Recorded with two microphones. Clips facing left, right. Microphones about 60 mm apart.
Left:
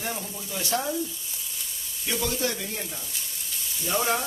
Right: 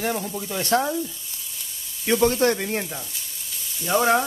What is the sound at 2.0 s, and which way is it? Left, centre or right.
Speech, right.